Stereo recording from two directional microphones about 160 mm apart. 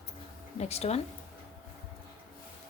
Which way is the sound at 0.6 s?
40° left (ahead or behind).